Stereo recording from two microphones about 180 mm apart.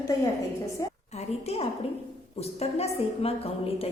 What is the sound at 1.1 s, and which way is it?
A woman's voice, 35° left (ahead or behind).